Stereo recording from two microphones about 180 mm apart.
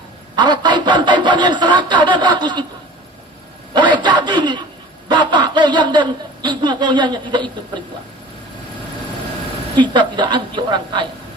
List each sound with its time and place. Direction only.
0.3 s speech: 25° right (ahead or behind)
3.8 s a man's voice: 25° right (ahead or behind)
9.7 s speech: 25° right (ahead or behind)